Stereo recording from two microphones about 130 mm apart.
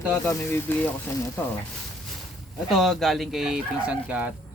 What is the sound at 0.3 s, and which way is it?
Speech, 20° left (ahead or behind).